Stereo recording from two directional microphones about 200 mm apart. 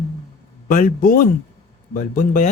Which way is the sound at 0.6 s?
45° left (ahead or behind).